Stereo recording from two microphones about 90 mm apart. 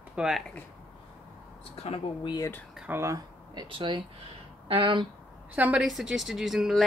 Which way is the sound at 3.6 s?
75° right (ahead or behind).